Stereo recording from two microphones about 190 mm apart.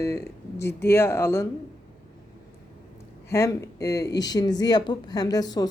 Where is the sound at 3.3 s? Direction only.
15° left (ahead or behind).